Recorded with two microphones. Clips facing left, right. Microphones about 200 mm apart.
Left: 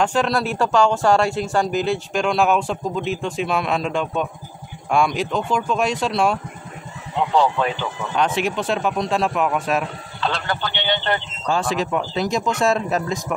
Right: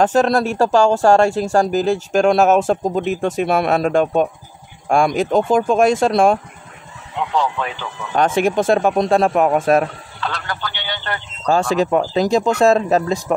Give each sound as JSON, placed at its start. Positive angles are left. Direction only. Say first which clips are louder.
{"t": 0.0, "sound": "speech", "louder": "right 5 dB", "side_deg": -40}
{"t": 8.4, "sound": "speech", "louder": "right 7 dB", "side_deg": -50}
{"t": 10.2, "sound": "speech", "louder": "left 2 dB", "side_deg": 25}
{"t": 11.4, "sound": "speech", "louder": "right 6 dB", "side_deg": -40}